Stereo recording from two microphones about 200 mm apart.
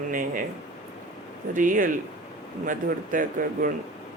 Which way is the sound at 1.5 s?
40° right (ahead or behind).